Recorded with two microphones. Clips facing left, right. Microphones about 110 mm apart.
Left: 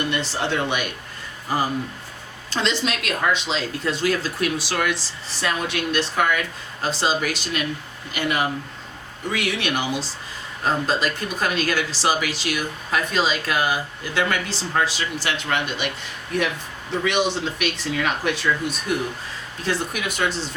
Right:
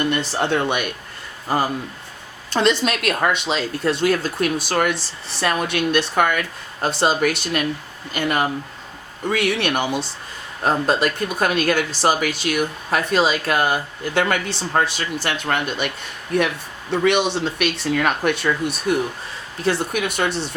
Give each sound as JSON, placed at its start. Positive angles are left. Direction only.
{"t": 0.1, "sound": "speech", "side_deg": -50}
{"t": 2.5, "sound": "speech", "side_deg": -55}
{"t": 5.4, "sound": "speech", "side_deg": -60}
{"t": 8.1, "sound": "speech", "side_deg": -45}
{"t": 17.0, "sound": "speech", "side_deg": -65}
{"t": 20.3, "sound": "speech", "side_deg": -65}